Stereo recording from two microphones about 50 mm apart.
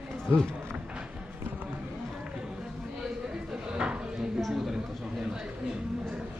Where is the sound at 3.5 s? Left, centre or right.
Centre.